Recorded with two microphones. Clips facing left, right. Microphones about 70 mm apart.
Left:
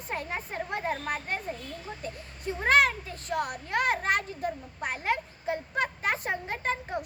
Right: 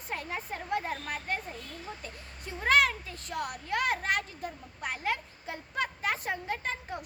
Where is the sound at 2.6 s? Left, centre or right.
Left.